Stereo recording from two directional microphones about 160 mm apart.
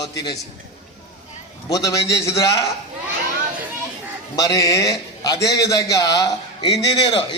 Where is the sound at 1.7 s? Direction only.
20° left (ahead or behind).